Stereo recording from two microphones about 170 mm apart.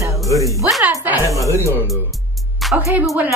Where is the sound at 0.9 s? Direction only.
15° right (ahead or behind).